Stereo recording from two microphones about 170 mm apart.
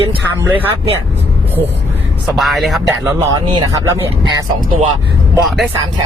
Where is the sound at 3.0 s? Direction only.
25° right (ahead or behind).